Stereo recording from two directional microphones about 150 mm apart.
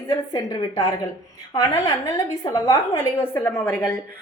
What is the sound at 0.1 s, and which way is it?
A woman's voice, 20° left (ahead or behind).